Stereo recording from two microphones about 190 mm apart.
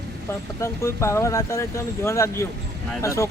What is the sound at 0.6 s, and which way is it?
Speech, 15° left (ahead or behind).